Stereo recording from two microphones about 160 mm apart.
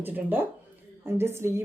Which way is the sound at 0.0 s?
10° right (ahead or behind).